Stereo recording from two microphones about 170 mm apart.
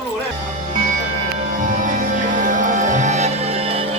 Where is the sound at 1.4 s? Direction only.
50° right (ahead or behind).